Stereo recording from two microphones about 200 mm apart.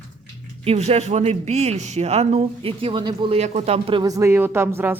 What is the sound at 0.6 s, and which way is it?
A man's voice, 30° right (ahead or behind).